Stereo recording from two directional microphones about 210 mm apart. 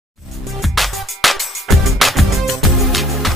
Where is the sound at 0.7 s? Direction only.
Centre (ahead or behind).